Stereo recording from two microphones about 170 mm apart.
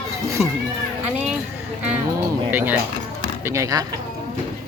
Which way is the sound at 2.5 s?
10° right (ahead or behind).